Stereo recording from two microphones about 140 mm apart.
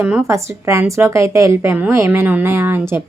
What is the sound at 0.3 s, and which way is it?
A woman's voice, 20° right (ahead or behind).